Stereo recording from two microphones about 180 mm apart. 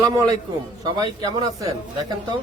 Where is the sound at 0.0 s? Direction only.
20° right (ahead or behind).